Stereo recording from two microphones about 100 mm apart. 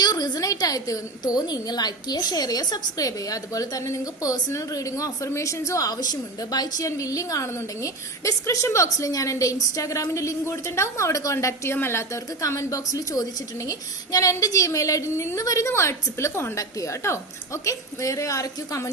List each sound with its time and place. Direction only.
0.0 s a woman's voice: 40° left (ahead or behind)